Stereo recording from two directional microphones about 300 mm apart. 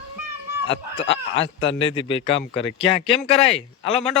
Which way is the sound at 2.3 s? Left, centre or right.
Left.